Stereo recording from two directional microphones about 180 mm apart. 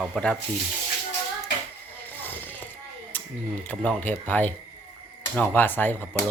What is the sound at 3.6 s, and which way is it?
Speech, 5° left (ahead or behind).